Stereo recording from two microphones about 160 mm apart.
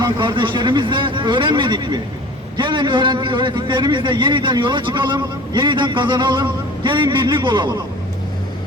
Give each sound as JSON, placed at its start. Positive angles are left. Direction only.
{"t": 0.0, "sound": "a man's voice", "side_deg": -30}